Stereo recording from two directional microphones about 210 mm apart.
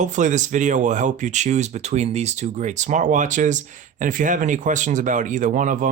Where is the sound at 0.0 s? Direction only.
35° right (ahead or behind).